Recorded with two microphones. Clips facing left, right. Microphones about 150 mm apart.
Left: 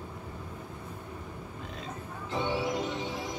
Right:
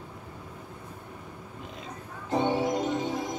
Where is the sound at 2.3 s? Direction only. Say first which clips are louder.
Right 5 dB; 45° right (ahead or behind).